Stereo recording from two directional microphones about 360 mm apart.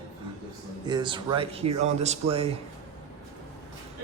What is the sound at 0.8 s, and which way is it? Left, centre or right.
Speech, centre.